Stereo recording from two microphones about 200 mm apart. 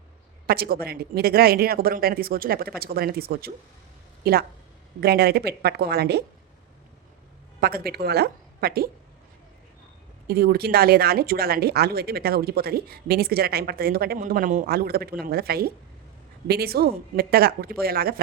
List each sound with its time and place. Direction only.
0.4 s speech: 50° right (ahead or behind)
7.6 s speech: 50° right (ahead or behind)
10.2 s speech: 50° right (ahead or behind)